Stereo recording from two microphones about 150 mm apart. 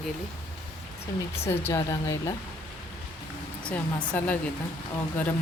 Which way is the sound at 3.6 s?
10° left (ahead or behind).